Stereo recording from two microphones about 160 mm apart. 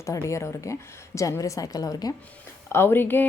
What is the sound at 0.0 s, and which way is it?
A woman's voice, 20° left (ahead or behind).